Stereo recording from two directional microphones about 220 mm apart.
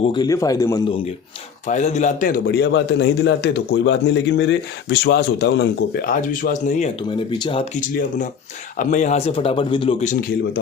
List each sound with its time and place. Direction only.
0.0 s a man's voice: 20° left (ahead or behind)
1.6 s a man's voice: 30° left (ahead or behind)
7.1 s speech: 20° left (ahead or behind)
7.8 s speech: 35° left (ahead or behind)